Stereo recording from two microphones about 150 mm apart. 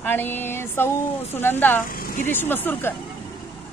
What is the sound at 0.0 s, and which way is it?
A woman's voice, 15° left (ahead or behind).